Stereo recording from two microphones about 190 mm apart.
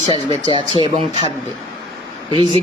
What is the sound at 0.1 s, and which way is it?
Speech, 30° left (ahead or behind).